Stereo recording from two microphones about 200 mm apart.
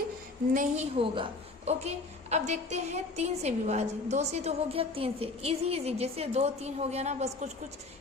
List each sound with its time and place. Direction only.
0.5 s a woman's voice: 40° right (ahead or behind)
0.9 s a woman's voice: 25° right (ahead or behind)